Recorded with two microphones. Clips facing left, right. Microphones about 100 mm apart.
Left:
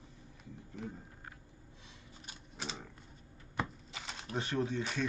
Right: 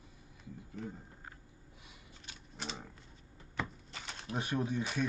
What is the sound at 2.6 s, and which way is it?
Typewriter, centre (ahead or behind).